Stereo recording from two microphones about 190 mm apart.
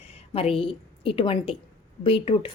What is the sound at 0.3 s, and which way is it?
A woman's voice, 30° left (ahead or behind).